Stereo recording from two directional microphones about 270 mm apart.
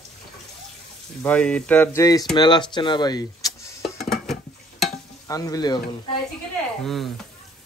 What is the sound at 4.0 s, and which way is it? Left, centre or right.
Dishes, centre.